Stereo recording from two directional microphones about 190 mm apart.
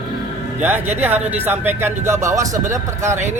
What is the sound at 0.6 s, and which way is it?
A man's voice, 10° right (ahead or behind).